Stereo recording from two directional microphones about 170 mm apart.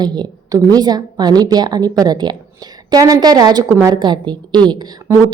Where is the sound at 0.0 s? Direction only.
25° right (ahead or behind).